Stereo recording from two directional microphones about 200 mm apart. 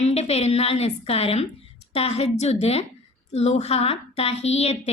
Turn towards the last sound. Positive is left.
turn(degrees=30)  # may be behind; listen again after turning